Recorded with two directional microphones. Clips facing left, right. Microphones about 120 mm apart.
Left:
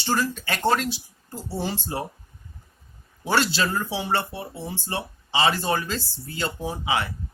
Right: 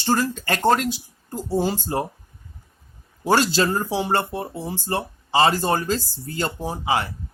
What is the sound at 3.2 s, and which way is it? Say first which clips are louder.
Speech: right 4 dB; 40° right (ahead or behind).